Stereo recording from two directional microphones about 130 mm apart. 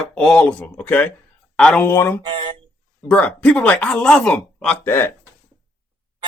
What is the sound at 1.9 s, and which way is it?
Speech, 20° left (ahead or behind).